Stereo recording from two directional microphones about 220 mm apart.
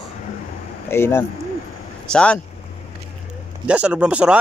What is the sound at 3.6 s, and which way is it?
Speech, 5° right (ahead or behind).